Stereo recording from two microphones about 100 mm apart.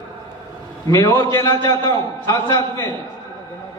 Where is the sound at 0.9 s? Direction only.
35° left (ahead or behind).